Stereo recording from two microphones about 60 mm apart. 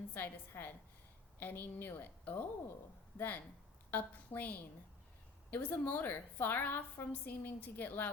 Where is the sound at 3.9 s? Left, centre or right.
Left.